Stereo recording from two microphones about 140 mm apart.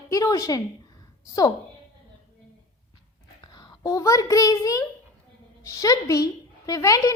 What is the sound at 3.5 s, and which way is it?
A child's voice, 25° left (ahead or behind).